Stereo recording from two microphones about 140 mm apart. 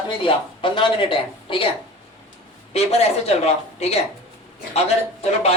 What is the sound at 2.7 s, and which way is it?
Speech, 50° left (ahead or behind).